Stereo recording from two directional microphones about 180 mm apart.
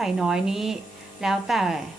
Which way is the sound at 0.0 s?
Centre (ahead or behind).